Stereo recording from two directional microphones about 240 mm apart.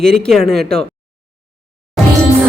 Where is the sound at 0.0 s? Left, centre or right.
Centre.